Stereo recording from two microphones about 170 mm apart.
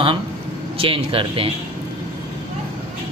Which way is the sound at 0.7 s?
35° right (ahead or behind).